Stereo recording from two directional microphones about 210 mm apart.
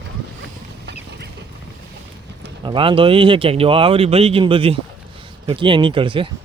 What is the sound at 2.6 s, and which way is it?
Speech, 25° right (ahead or behind).